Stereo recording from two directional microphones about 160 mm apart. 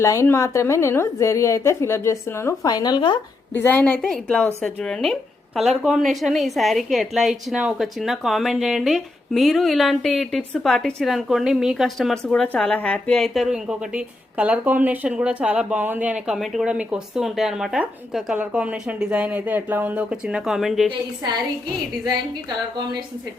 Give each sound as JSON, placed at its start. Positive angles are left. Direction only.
{"t": 0.0, "sound": "a woman's voice", "side_deg": 20}
{"t": 3.5, "sound": "a woman's voice", "side_deg": 10}
{"t": 21.2, "sound": "a woman's voice", "side_deg": -25}